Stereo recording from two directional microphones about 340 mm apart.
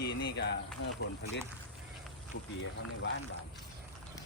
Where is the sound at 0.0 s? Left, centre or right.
Left.